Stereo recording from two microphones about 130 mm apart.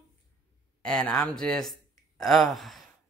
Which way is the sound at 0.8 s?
5° left (ahead or behind).